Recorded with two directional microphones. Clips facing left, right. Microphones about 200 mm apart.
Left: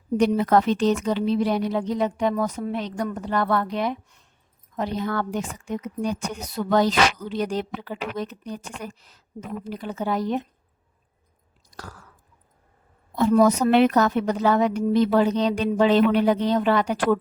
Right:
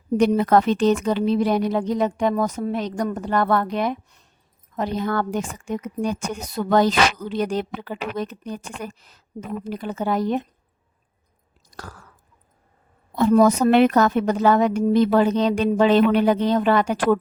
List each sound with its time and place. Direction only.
0.2 s a woman's voice: 55° right (ahead or behind)
11.7 s chewing: 50° right (ahead or behind)
13.1 s a woman's voice: 50° right (ahead or behind)